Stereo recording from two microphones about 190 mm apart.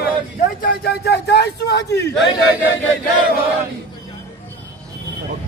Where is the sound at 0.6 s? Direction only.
55° left (ahead or behind).